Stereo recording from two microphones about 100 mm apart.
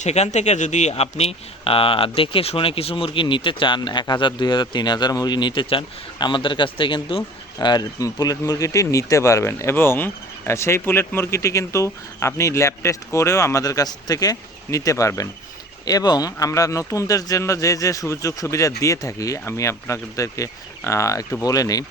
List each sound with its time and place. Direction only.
0.9 s speech: 90° left; by 7.7 s 60° left (ahead or behind)
7.7 s speech: 40° left (ahead or behind)